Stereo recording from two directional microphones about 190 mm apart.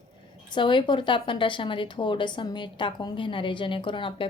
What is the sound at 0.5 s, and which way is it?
A woman's voice, 25° left (ahead or behind).